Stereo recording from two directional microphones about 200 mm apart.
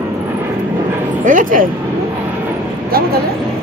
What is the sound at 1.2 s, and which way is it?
Bow-wow, 40° right (ahead or behind).